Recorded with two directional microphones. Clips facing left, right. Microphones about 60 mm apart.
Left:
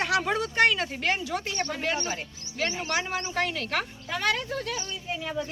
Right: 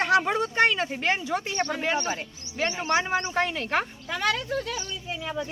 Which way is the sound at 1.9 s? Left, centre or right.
Right.